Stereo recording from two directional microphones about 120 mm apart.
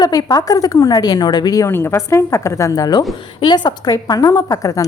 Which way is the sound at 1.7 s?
20° left (ahead or behind).